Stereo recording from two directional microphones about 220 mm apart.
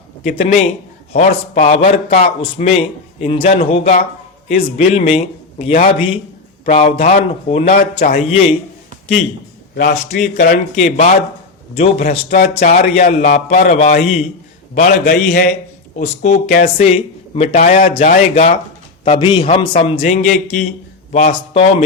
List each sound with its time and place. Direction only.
0.3 s a man's voice: 30° left (ahead or behind)
10.2 s a man's voice: 35° left (ahead or behind)
12.3 s a man's voice: 35° left (ahead or behind)
14.8 s a man's voice: 40° left (ahead or behind)
16.0 s a man's voice: 35° left (ahead or behind)